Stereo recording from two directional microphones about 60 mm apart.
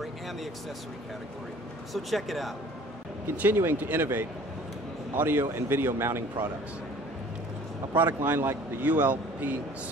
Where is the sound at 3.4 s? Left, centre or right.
Right.